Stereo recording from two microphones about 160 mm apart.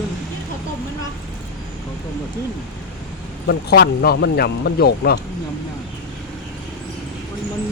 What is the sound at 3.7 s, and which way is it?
Speech, 80° left.